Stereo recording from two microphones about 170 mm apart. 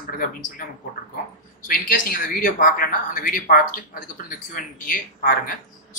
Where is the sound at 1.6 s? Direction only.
55° left (ahead or behind).